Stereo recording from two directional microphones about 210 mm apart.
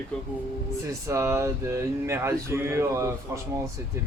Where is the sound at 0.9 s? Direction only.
15° right (ahead or behind).